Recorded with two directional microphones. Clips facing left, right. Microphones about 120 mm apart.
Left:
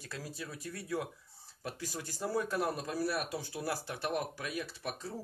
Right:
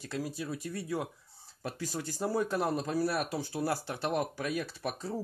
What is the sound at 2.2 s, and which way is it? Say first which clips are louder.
Speech: right 3 dB; 25° right (ahead or behind).